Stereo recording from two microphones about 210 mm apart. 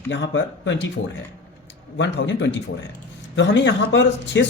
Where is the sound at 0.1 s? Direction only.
60° left (ahead or behind).